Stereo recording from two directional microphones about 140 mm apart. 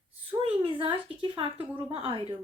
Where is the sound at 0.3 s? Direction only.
45° right (ahead or behind).